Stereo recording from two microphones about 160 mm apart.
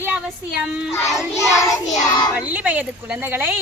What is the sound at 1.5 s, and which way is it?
Child singing, 25° left (ahead or behind).